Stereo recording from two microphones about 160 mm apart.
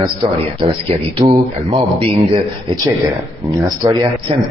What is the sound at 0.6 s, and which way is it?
Speech, 35° right (ahead or behind).